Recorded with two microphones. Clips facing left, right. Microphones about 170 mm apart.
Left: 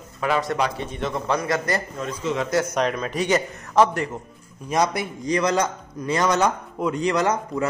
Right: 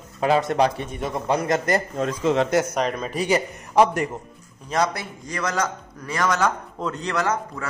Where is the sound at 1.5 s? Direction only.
45° right (ahead or behind).